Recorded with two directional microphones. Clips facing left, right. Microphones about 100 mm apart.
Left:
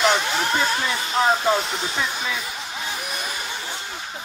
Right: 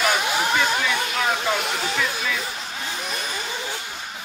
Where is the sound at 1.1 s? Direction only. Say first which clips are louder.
Left 9 dB; 30° left (ahead or behind).